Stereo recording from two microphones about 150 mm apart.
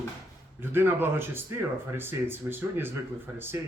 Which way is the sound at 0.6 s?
15° right (ahead or behind).